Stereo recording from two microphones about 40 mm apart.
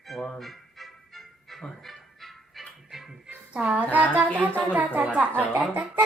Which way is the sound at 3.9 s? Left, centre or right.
Right.